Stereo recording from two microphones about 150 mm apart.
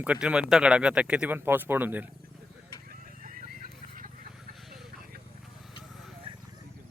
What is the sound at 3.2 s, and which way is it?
Horse, 65° right (ahead or behind).